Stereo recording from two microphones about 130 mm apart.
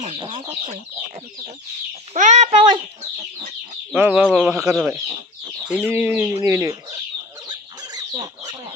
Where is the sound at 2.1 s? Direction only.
65° right (ahead or behind).